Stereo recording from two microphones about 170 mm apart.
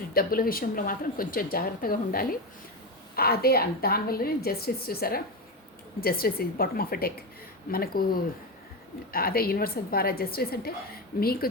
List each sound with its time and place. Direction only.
0.1 s a woman's voice: 60° left (ahead or behind)